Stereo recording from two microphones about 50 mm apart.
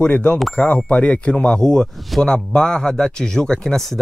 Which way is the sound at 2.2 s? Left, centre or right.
Centre.